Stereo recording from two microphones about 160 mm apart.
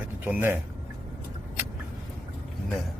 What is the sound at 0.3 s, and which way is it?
Speech, 15° right (ahead or behind).